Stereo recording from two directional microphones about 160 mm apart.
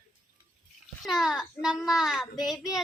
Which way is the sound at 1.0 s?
Centre (ahead or behind).